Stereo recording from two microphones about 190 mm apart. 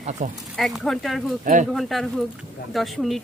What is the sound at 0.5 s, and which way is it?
Speech, centre (ahead or behind).